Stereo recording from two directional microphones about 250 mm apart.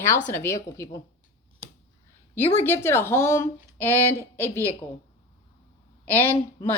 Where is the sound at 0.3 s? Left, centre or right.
Centre.